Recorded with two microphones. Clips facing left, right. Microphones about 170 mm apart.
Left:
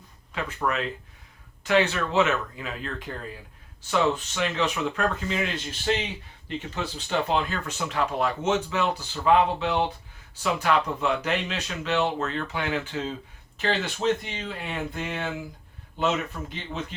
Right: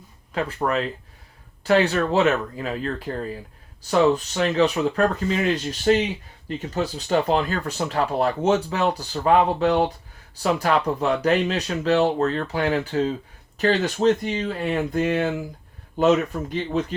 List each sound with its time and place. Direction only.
0.3 s speech: 35° right (ahead or behind)